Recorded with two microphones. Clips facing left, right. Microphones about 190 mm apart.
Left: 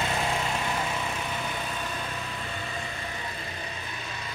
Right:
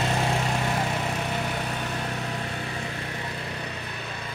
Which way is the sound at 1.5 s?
65° right (ahead or behind).